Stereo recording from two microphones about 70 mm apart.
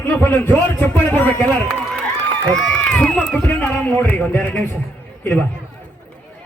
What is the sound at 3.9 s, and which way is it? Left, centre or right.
Speech, left.